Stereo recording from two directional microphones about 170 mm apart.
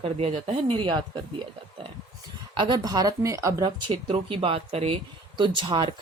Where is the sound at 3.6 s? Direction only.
30° right (ahead or behind).